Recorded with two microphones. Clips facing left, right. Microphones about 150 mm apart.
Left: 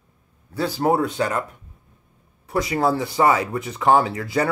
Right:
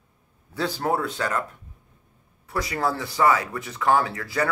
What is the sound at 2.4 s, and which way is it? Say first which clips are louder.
Speech: left 5 dB; 20° left (ahead or behind).